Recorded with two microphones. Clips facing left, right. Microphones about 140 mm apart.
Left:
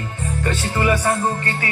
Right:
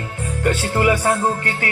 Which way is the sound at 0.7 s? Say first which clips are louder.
Right 1 dB; 80° right.